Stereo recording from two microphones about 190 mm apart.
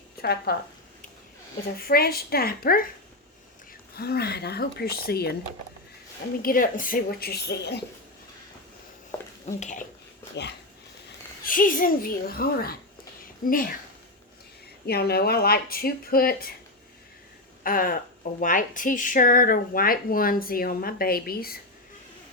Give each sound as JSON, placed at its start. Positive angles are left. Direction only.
{"t": 0.2, "sound": "speech", "side_deg": 55}
{"t": 1.9, "sound": "speech", "side_deg": 55}
{"t": 3.9, "sound": "speech", "side_deg": 55}
{"t": 6.4, "sound": "speech", "side_deg": 45}
{"t": 9.1, "sound": "a sound", "side_deg": 15}
{"t": 9.6, "sound": "speech", "side_deg": 40}
{"t": 11.4, "sound": "speech", "side_deg": 45}
{"t": 14.8, "sound": "speech", "side_deg": 55}
{"t": 17.6, "sound": "speech", "side_deg": 45}